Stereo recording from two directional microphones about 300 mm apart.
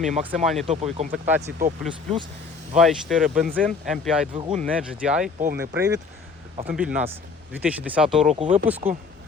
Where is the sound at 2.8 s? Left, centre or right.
Centre.